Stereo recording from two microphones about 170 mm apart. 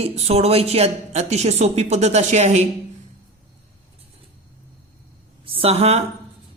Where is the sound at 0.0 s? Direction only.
35° right (ahead or behind).